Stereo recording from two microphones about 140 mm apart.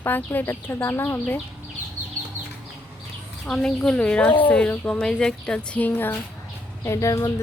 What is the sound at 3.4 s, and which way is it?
Speech, 5° left (ahead or behind).